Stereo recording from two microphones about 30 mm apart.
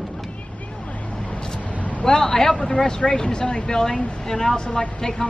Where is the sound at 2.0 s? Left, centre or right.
Left.